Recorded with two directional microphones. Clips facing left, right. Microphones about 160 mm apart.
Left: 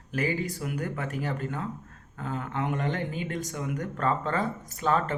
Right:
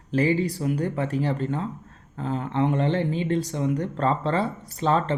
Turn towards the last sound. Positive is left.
turn(degrees=-30)  # may be behind; listen again after turning